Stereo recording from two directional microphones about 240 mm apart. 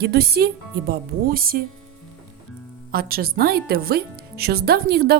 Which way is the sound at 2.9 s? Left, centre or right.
Right.